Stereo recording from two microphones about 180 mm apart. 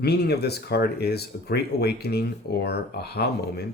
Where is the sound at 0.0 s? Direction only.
65° left (ahead or behind).